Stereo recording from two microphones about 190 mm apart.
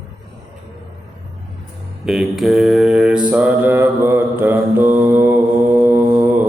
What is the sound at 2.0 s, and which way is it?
Mantra, centre (ahead or behind).